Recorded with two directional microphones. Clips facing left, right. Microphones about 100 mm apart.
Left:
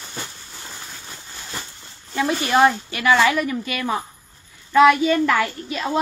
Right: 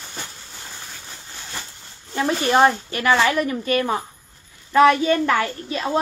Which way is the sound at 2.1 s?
40° right (ahead or behind).